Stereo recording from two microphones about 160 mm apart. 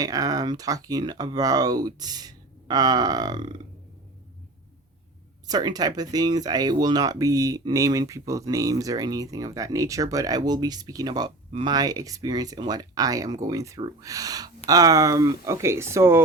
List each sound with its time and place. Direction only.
0.0 s speech: 20° right (ahead or behind)
5.5 s speech: 25° right (ahead or behind)